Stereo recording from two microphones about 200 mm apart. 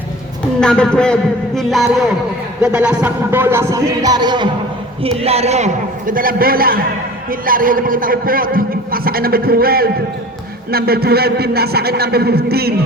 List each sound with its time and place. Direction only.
0.6 s a man's voice: 5° left (ahead or behind)
2.6 s music: 5° right (ahead or behind); by 4.4 s 20° right (ahead or behind)
5.0 s a man's voice: 30° right (ahead or behind); by 12.7 s 50° right (ahead or behind)